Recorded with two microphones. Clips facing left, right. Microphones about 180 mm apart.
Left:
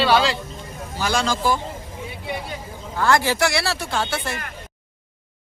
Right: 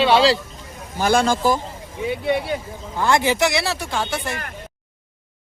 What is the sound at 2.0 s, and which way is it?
Speech, 70° right (ahead or behind).